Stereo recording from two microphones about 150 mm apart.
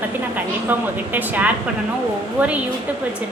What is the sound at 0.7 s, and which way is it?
A woman's voice, 10° right (ahead or behind).